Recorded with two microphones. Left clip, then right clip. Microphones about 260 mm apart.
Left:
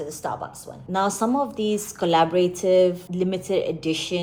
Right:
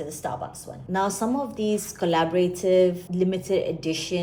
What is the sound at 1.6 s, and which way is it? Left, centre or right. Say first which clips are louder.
Speech: left 1 dB; left.